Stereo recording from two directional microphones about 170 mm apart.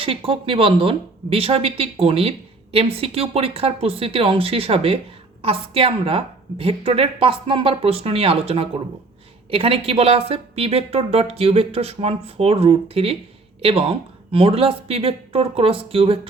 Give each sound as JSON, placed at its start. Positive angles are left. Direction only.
{"t": 0.0, "sound": "a woman's voice", "side_deg": -30}